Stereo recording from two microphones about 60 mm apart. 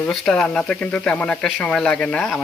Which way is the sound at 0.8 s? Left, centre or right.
Left.